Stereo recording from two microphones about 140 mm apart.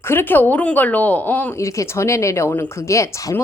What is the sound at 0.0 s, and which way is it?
A woman's voice, 15° left (ahead or behind).